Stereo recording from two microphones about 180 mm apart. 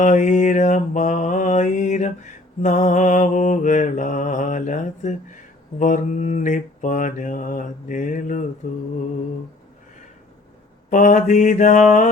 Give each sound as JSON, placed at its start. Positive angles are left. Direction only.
{"t": 0.0, "sound": "mantra", "side_deg": 45}
{"t": 10.8, "sound": "mantra", "side_deg": 45}